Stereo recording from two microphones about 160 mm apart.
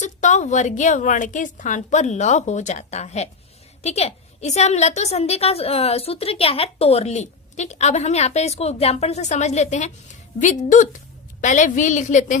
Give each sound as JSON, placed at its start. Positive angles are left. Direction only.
{"t": 0.0, "sound": "a woman's voice", "side_deg": 45}